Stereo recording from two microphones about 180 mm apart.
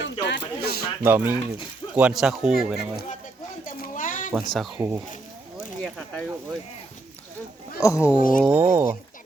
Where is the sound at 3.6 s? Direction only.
50° left (ahead or behind).